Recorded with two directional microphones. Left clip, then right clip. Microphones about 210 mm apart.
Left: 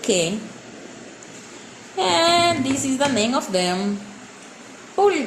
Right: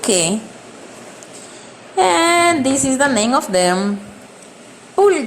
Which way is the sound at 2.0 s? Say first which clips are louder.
Right 4 dB; 30° right (ahead or behind).